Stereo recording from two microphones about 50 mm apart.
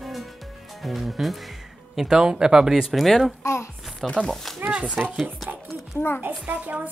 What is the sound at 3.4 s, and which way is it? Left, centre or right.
Speech, left.